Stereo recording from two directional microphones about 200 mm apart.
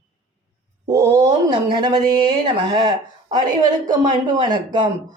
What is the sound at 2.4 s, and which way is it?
Speech, 20° right (ahead or behind).